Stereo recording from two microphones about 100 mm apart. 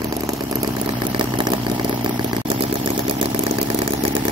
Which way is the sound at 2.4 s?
60° right (ahead or behind).